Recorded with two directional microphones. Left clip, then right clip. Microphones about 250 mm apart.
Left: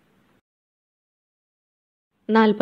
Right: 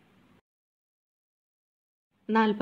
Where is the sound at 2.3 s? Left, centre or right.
Left.